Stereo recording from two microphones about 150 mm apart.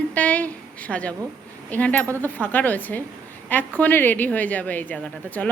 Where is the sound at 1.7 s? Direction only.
10° left (ahead or behind).